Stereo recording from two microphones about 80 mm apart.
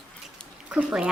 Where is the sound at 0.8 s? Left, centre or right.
Centre.